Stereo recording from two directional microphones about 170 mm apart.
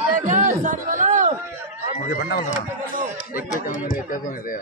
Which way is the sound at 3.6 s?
55° left (ahead or behind).